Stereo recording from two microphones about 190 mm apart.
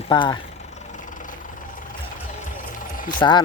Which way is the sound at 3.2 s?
25° left (ahead or behind).